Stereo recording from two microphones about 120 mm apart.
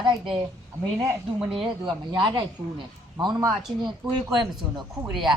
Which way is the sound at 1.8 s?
40° right (ahead or behind).